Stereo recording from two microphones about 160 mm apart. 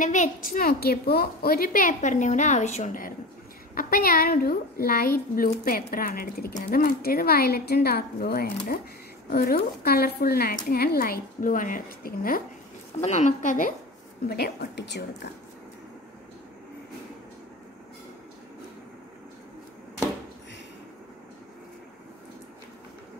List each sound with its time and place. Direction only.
0.0 s a woman's voice: 50° left (ahead or behind)
3.7 s a woman's voice: 65° left (ahead or behind)
13.0 s speech: 45° left (ahead or behind)
14.3 s a woman's voice: 90° left